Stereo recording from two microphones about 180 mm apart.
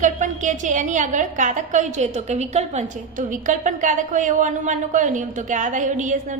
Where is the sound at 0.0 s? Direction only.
45° right (ahead or behind).